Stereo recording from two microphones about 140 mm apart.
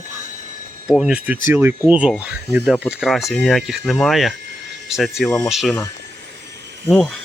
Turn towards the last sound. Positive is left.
turn(degrees=5)  # may be behind; listen again after turning